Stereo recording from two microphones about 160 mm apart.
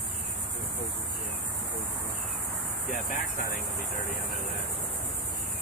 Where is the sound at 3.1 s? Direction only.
60° left (ahead or behind).